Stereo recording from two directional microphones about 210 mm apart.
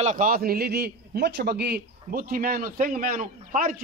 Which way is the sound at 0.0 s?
40° right (ahead or behind).